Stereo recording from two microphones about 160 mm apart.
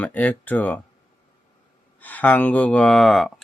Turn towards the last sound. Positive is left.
turn(degrees=0)  # may be behind; listen again after turning